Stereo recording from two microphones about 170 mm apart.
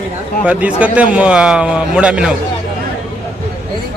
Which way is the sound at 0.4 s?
10° right (ahead or behind).